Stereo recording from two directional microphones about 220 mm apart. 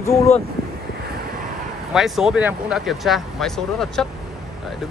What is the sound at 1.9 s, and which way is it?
Speech, centre (ahead or behind).